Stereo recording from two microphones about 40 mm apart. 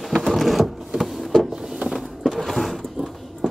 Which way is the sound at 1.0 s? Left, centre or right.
Centre.